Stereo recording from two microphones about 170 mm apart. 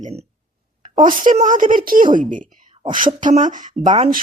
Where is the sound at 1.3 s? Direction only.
50° right (ahead or behind).